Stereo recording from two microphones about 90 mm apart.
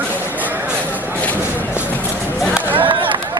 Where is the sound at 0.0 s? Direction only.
20° right (ahead or behind).